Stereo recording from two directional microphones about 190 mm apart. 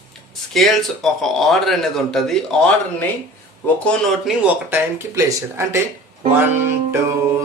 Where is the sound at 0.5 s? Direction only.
Centre (ahead or behind).